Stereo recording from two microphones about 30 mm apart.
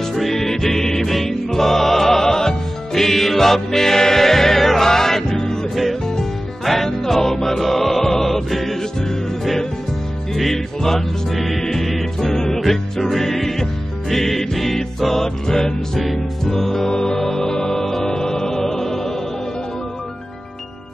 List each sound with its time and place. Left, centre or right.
0.3 s music: centre
6.6 s music: centre
10.3 s music: centre
15.2 s music: centre